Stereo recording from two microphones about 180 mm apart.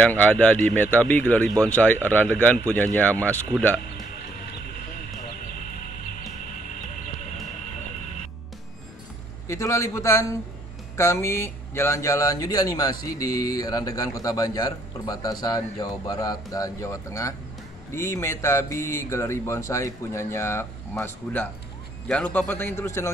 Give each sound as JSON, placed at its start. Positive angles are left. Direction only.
{"t": 0.0, "sound": "speech", "side_deg": 10}
{"t": 9.5, "sound": "a man's voice", "side_deg": 15}